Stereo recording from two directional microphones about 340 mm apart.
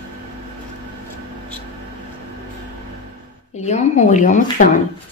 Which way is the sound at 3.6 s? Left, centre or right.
Centre.